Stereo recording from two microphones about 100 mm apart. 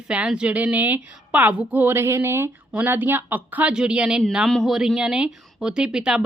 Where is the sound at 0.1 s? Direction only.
10° right (ahead or behind).